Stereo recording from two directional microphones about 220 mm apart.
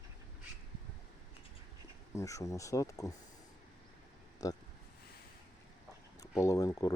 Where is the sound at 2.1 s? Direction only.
15° left (ahead or behind).